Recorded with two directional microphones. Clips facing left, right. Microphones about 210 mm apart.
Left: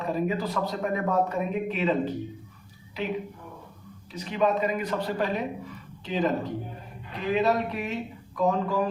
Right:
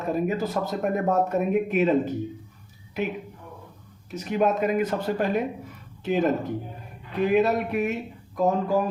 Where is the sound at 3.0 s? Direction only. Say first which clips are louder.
Right 2 dB; 50° right (ahead or behind).